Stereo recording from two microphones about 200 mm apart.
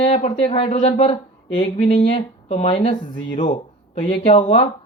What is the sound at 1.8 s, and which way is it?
Speech, 40° left (ahead or behind).